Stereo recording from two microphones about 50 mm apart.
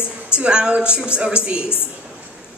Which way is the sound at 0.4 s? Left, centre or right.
Centre.